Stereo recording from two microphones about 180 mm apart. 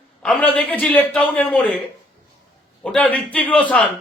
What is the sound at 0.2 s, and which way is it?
A man's voice, 5° left (ahead or behind).